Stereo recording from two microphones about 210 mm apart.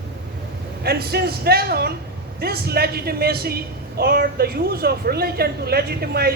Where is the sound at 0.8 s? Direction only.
50° right (ahead or behind).